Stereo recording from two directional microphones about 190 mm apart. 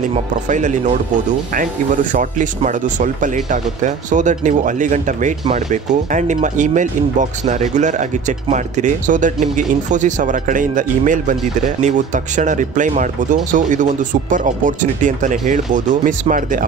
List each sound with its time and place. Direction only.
0.1 s speech: 40° right (ahead or behind)
2.1 s speech: 40° right (ahead or behind)